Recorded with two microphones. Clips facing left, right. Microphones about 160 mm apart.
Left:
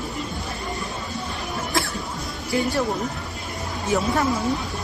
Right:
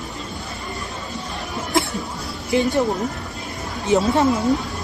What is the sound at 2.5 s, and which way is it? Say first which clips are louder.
Speech: right 4 dB; 20° right (ahead or behind).